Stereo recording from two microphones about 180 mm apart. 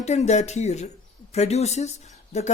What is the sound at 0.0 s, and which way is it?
Speech, 40° left (ahead or behind).